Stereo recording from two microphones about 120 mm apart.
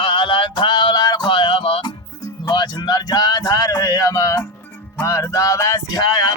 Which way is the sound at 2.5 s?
35° left (ahead or behind).